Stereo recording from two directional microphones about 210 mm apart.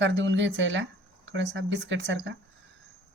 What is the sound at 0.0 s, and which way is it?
Speech, 60° right (ahead or behind).